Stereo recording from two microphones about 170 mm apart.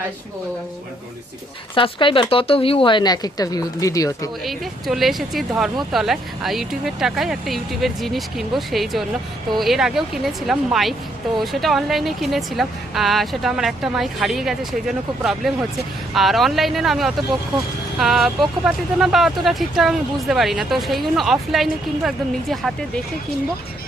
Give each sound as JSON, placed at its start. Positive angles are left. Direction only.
{"t": 1.7, "sound": "speech", "side_deg": 30}
{"t": 4.4, "sound": "speech", "side_deg": 0}